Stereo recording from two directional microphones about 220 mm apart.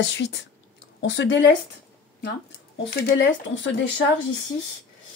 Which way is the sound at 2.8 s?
45° left (ahead or behind).